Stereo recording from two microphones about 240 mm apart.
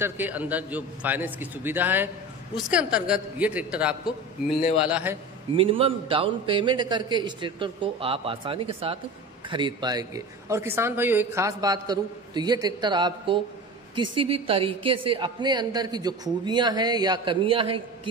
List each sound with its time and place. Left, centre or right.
0.0 s a man's voice: centre
5.6 s a woman's voice: right